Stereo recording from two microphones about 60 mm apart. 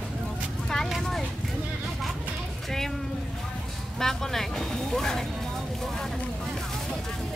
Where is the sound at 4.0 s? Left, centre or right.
Centre.